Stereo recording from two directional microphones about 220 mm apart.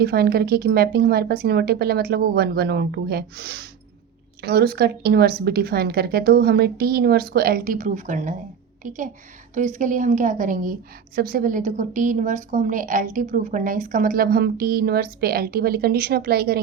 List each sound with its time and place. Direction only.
0.0 s a woman's voice: 45° right (ahead or behind)